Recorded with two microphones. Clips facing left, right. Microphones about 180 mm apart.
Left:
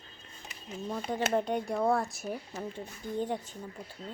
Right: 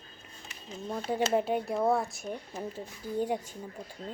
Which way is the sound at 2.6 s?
10° right (ahead or behind).